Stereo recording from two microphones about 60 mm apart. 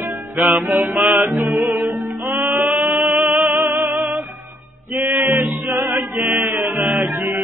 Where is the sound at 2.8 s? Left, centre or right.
Right.